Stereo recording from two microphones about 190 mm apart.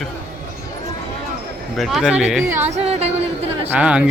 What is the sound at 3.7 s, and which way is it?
Speech, 5° right (ahead or behind).